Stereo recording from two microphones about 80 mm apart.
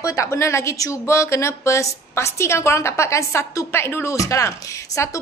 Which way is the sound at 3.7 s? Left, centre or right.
Left.